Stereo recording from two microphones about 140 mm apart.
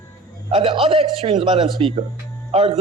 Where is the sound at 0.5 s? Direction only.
40° right (ahead or behind).